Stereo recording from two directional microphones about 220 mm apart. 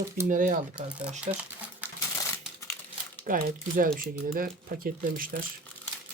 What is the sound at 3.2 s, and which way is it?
Speech, 40° right (ahead or behind).